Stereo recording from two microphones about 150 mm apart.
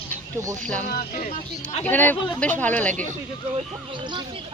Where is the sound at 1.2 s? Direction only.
45° left (ahead or behind).